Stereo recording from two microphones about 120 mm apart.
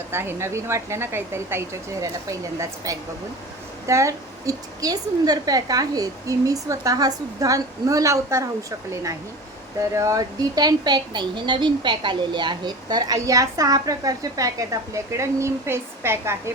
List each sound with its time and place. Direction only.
0.1 s a woman's voice: 20° right (ahead or behind)
9.9 s speech: 25° right (ahead or behind)